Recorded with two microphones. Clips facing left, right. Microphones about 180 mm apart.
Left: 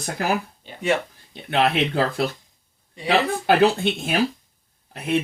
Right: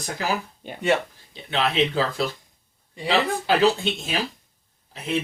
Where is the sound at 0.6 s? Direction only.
50° right (ahead or behind).